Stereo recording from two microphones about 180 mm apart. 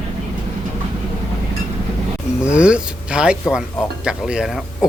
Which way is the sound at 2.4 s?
5° right (ahead or behind).